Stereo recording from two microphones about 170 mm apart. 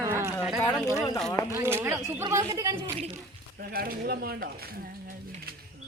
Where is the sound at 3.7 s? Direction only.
65° right (ahead or behind).